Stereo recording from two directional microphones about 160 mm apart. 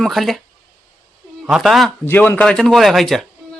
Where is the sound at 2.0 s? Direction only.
10° left (ahead or behind).